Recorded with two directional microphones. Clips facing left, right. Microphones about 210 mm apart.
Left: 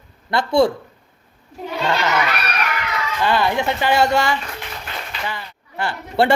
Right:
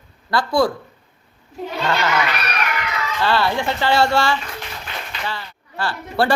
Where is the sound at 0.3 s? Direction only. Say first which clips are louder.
Left 2 dB; 25° left (ahead or behind).